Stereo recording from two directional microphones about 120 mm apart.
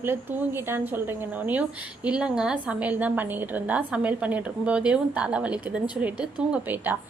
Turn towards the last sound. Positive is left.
turn(degrees=-15)  # may be behind; listen again after turning